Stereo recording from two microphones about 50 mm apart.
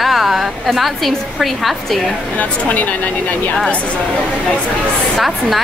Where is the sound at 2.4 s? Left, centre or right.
Left.